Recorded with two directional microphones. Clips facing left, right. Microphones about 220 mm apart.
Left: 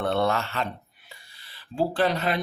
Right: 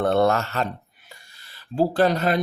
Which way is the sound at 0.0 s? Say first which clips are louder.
Right 5 dB; 45° right (ahead or behind).